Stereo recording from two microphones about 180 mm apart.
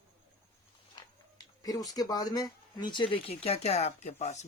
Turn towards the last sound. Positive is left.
turn(degrees=40)  # may be behind; listen again after turning